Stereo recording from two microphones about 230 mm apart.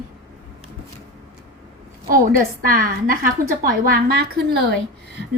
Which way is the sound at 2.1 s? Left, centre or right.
Right.